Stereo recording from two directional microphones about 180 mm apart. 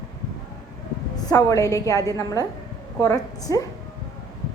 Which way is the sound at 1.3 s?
20° left (ahead or behind).